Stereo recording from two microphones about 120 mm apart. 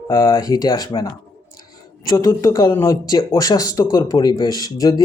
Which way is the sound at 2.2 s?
30° left (ahead or behind).